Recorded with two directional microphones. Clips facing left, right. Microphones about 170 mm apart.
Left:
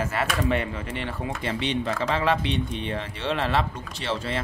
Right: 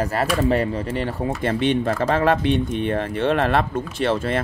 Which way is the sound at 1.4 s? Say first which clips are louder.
Right 7 dB; 50° right (ahead or behind).